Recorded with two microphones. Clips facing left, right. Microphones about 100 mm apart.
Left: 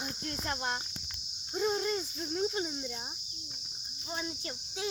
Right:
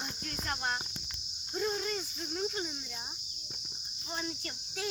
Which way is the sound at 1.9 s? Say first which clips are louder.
Left 3 dB; 30° left (ahead or behind).